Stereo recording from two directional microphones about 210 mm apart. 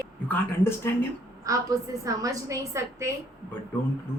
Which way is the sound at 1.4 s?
15° right (ahead or behind).